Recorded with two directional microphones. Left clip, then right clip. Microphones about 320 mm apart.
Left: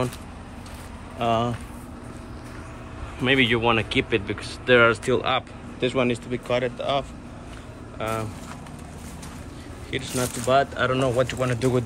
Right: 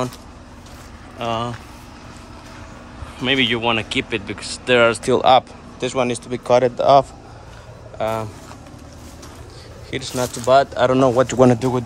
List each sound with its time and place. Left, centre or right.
1.1 s speech: centre
3.2 s speech: centre
6.5 s speech: right
8.0 s speech: centre
9.8 s speech: centre
11.5 s speech: centre